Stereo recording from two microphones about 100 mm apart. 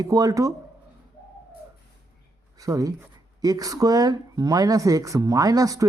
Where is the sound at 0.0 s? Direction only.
35° right (ahead or behind).